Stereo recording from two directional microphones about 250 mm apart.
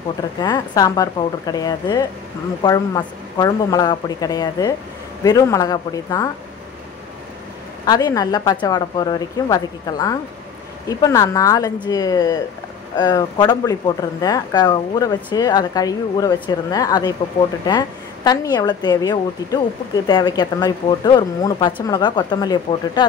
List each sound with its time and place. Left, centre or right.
0.4 s speech: centre
7.8 s speech: centre